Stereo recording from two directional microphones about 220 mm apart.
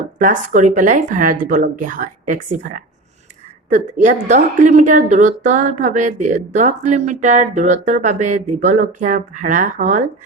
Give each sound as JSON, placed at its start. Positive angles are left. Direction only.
{"t": 0.2, "sound": "a woman's voice", "side_deg": -35}